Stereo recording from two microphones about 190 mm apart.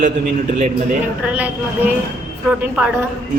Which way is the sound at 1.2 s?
5° right (ahead or behind).